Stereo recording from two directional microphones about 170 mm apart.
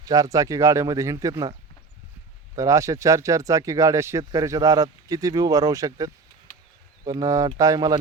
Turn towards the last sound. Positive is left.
turn(degrees=-20)  # may be behind; listen again after turning